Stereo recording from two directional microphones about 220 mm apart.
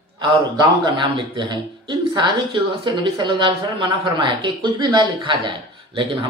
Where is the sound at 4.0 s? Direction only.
20° right (ahead or behind).